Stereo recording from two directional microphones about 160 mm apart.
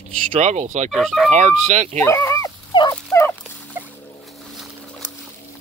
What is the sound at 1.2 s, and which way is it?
Speech, 45° right (ahead or behind).